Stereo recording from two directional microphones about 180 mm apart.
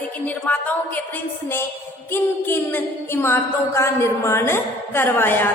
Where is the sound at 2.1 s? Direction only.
10° left (ahead or behind).